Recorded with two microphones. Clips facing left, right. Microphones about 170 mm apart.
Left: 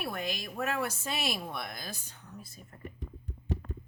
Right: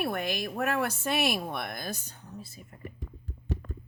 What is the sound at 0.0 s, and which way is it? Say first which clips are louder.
Speech: right 5 dB; 60° right (ahead or behind).